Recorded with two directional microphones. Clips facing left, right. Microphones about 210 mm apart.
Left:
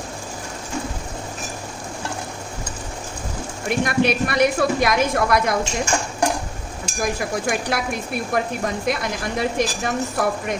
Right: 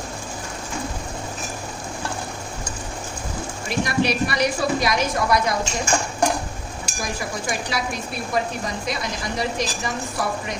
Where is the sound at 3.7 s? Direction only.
55° left (ahead or behind).